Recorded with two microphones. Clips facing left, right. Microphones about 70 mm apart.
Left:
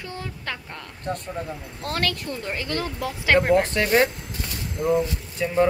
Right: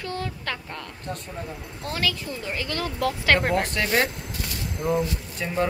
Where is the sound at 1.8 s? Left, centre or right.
Left.